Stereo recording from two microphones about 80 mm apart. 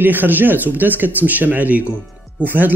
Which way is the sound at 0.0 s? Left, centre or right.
Right.